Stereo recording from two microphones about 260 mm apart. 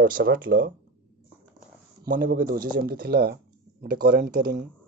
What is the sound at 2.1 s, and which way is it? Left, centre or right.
Speech, right.